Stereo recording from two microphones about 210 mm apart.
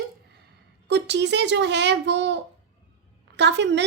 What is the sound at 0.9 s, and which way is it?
A woman's voice, 55° right (ahead or behind).